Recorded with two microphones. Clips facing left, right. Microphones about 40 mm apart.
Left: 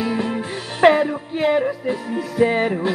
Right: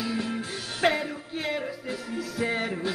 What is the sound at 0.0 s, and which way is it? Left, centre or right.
Music, left.